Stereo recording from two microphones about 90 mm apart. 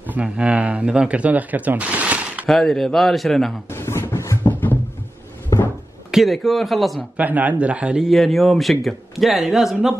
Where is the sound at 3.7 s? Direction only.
30° left (ahead or behind).